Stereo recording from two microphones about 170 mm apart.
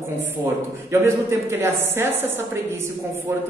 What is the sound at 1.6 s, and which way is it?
Speech, 15° right (ahead or behind).